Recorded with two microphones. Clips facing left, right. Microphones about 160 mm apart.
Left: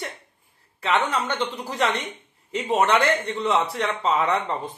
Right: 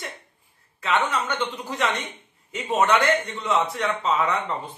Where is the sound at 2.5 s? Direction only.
30° left (ahead or behind).